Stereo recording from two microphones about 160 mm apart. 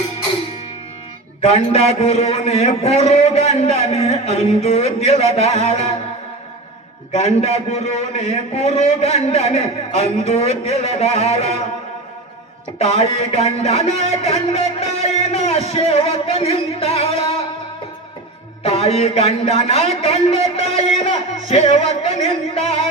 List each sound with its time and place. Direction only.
1.4 s a man's voice: 40° left (ahead or behind)
7.1 s a man's voice: 40° left (ahead or behind)
12.8 s a man's voice: 40° left (ahead or behind)
18.6 s a man's voice: 35° left (ahead or behind)